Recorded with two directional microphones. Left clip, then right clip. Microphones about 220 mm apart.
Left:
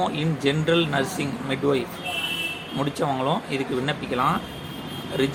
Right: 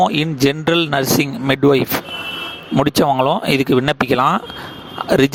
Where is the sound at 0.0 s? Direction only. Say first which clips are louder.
Right 9 dB; 50° right (ahead or behind).